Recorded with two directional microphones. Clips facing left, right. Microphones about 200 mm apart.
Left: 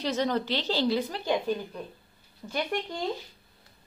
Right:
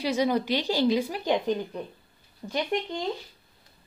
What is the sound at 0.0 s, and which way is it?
Speech, 10° right (ahead or behind).